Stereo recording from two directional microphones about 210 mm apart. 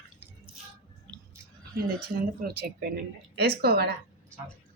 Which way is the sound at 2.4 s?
50° right (ahead or behind).